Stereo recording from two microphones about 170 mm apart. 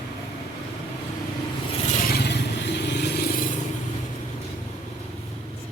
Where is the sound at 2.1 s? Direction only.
75° left (ahead or behind).